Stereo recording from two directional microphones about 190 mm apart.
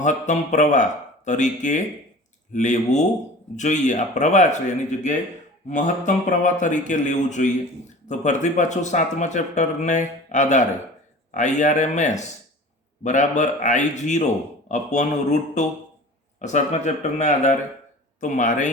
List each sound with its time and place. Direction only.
0.0 s speech: 40° left (ahead or behind)